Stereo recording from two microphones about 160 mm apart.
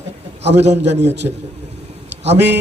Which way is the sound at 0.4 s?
90° right.